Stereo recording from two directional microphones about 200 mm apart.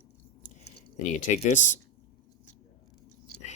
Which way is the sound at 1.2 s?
35° left (ahead or behind).